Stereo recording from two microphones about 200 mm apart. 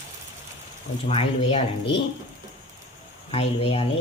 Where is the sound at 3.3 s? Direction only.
30° left (ahead or behind).